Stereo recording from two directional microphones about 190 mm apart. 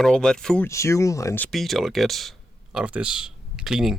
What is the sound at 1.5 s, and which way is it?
Speech, centre (ahead or behind).